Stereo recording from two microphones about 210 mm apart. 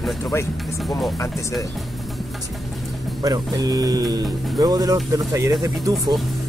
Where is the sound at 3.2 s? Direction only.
15° right (ahead or behind).